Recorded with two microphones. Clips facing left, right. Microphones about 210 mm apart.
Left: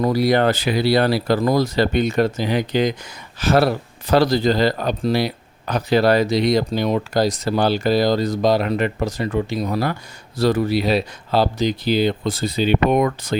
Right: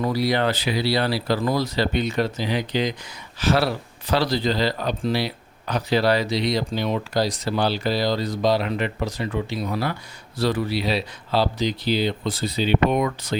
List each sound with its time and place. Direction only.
0.0 s speech: 50° left (ahead or behind)